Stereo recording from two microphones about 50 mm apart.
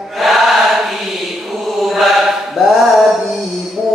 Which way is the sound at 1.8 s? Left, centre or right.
Centre.